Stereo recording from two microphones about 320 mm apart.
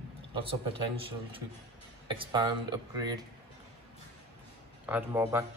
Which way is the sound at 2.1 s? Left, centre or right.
Centre.